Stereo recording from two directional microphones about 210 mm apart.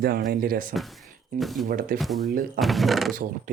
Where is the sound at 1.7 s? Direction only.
45° right (ahead or behind).